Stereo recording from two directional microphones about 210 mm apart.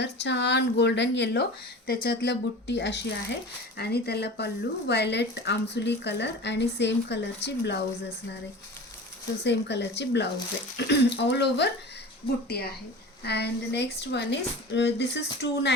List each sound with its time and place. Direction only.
0.0 s a woman's voice: 55° left (ahead or behind)
9.4 s a woman's voice: 55° left (ahead or behind)
13.2 s speech: 50° left (ahead or behind)